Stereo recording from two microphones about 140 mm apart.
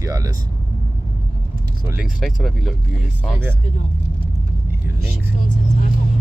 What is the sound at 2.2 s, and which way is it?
Speech, centre (ahead or behind).